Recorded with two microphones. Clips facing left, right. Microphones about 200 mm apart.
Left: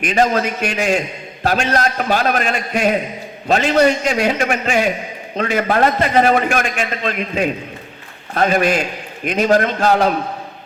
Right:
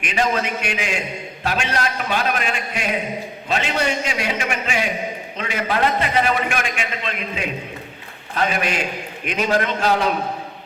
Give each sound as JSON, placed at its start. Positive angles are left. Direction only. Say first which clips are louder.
{"t": 0.0, "sound": "a man's voice", "louder": "left 5 dB", "side_deg": 40}